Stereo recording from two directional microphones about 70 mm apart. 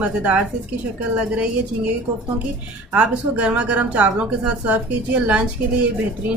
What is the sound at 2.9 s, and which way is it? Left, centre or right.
A woman's voice, centre.